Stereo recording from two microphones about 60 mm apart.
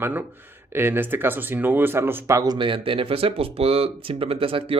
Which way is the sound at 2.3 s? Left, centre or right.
Right.